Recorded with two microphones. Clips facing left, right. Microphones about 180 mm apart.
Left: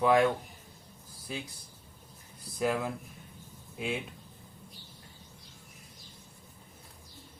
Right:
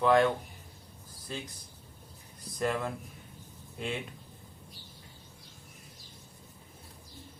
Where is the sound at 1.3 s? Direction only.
5° left (ahead or behind).